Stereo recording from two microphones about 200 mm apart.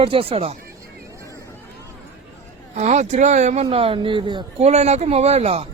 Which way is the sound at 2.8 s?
35° right (ahead or behind).